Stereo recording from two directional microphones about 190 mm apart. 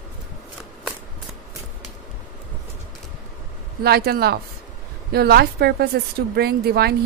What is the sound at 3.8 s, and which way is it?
Speech, 55° right (ahead or behind).